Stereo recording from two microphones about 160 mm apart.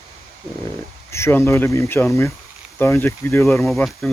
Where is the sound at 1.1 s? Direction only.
15° left (ahead or behind).